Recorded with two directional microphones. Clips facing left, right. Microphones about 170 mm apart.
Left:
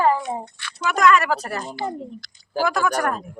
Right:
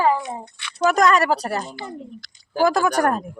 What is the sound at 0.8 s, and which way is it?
A woman's voice, 40° right (ahead or behind).